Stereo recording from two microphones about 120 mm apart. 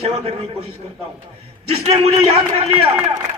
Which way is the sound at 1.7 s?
55° right (ahead or behind).